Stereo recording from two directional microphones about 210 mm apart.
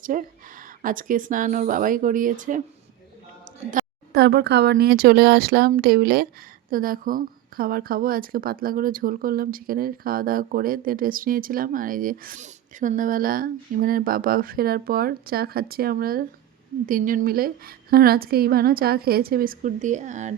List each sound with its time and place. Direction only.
0.0 s speech: 40° right (ahead or behind)
3.6 s a woman's voice: 40° right (ahead or behind)